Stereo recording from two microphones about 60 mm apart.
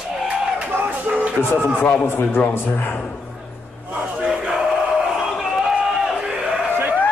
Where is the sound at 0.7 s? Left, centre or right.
Right.